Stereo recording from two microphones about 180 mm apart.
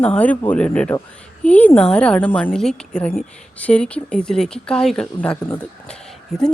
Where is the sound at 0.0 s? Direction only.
10° left (ahead or behind).